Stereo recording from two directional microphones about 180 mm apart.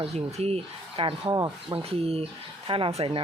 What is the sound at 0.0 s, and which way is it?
Speech, 35° right (ahead or behind).